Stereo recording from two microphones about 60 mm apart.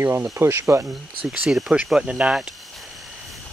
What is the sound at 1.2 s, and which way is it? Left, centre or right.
Speech, centre.